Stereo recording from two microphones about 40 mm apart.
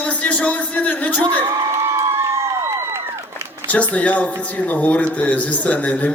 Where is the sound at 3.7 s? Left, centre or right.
Left.